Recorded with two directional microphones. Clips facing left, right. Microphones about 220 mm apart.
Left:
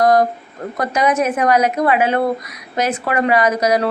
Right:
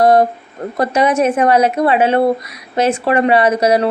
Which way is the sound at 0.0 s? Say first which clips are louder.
Right 3 dB; 30° right (ahead or behind).